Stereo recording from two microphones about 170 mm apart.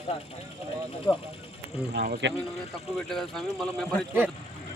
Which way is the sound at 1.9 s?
55° right (ahead or behind).